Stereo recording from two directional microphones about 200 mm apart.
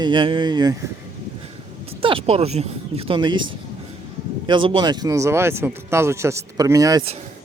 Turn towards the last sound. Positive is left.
turn(degrees=-20)  # may be behind; listen again after turning